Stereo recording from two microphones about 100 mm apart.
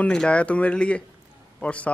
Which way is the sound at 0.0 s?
10° left (ahead or behind).